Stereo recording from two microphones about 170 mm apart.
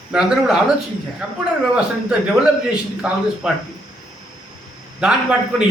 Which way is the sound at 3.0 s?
5° right (ahead or behind).